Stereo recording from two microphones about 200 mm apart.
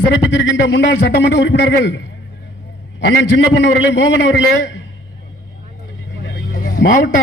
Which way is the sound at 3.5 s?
60° left (ahead or behind).